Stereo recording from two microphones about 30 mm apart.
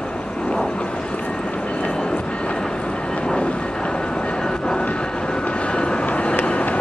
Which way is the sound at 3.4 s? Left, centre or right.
Left.